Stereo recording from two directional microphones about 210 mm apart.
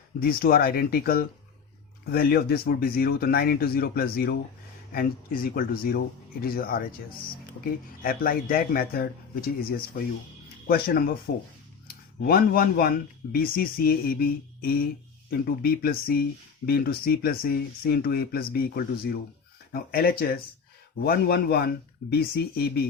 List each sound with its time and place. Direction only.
0.2 s speech: 45° left (ahead or behind)
8.0 s speech: 45° left (ahead or behind)